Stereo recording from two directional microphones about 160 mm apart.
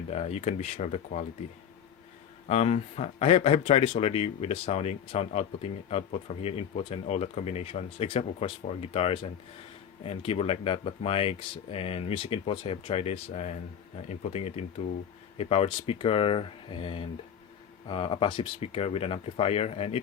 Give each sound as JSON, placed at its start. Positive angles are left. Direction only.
{"t": 0.1, "sound": "speech", "side_deg": 40}
{"t": 2.5, "sound": "speech", "side_deg": 45}